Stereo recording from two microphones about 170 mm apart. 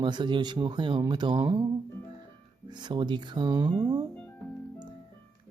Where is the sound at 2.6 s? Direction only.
25° right (ahead or behind).